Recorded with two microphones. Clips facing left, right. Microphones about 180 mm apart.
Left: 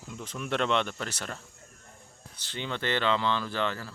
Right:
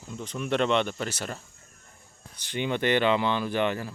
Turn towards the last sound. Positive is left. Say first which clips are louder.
# right 5 dB
turn(degrees=-15)  # may be behind; listen again after turning